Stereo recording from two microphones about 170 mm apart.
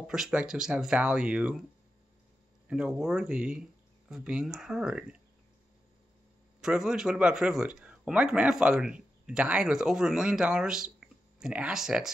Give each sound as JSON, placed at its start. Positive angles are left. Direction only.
{"t": 0.0, "sound": "speech", "side_deg": -5}
{"t": 2.7, "sound": "speech", "side_deg": -5}
{"t": 6.6, "sound": "speech", "side_deg": -5}